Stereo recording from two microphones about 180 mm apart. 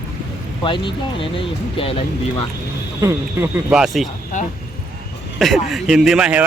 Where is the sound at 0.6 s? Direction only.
25° left (ahead or behind).